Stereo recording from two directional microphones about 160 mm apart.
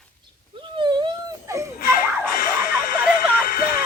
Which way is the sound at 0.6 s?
30° right (ahead or behind).